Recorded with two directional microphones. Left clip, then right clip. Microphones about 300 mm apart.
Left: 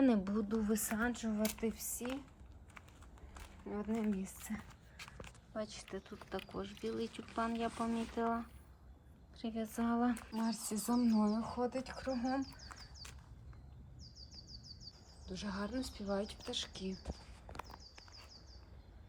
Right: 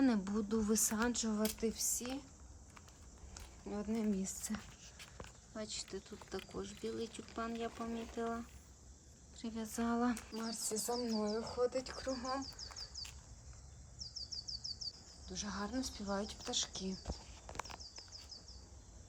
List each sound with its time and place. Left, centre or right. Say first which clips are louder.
0.0 s speech: left 2 dB; centre
3.7 s speech: even; centre
5.5 s speech: left 1 dB; centre
15.3 s speech: even; centre
17.1 s a sound: right 2 dB; left